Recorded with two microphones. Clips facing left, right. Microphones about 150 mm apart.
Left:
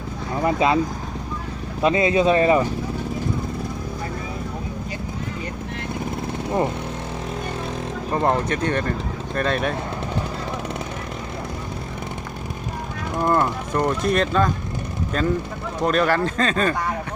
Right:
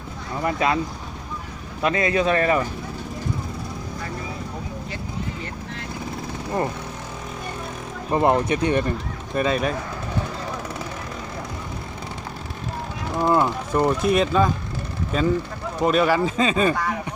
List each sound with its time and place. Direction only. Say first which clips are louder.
0.4 s speech: left 3 dB; 20° left (ahead or behind)
1.8 s speech: left 3 dB; 25° left (ahead or behind)
8.1 s speech: right 2 dB; 10° right (ahead or behind)
13.1 s speech: right 1 dB; centre (ahead or behind)
13.4 s speech: right 1 dB; 15° right (ahead or behind)